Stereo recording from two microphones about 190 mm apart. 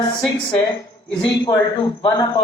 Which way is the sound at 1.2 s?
20° left (ahead or behind).